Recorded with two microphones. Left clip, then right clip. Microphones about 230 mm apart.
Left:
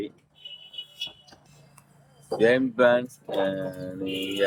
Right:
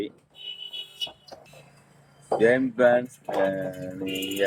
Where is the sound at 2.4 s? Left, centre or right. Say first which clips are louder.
Even; centre.